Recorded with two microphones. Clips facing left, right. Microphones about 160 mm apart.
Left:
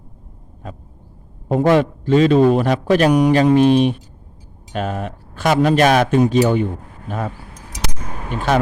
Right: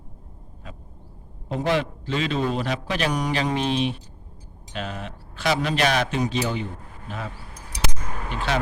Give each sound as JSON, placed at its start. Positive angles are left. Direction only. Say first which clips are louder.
{"t": 1.5, "sound": "a man's voice", "louder": "left 9 dB", "side_deg": 50}